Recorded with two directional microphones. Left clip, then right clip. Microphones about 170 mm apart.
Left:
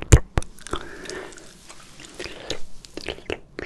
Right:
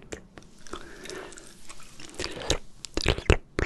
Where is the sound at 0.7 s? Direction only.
25° left (ahead or behind).